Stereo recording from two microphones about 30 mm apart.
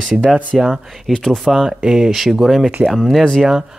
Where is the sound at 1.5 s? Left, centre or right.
Centre.